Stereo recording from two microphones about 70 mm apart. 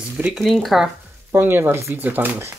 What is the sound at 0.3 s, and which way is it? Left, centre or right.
Speech, centre.